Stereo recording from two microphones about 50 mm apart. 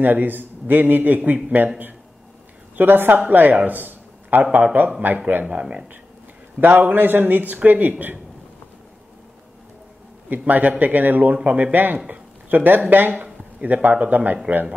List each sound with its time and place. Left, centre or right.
0.0 s a man's voice: right
2.7 s a woman's voice: right
6.6 s a man's voice: right
10.3 s a man's voice: right
12.1 s a sound: right
13.2 s speech: right